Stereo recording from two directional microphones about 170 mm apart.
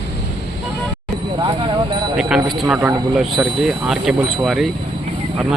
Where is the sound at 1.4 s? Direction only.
30° right (ahead or behind).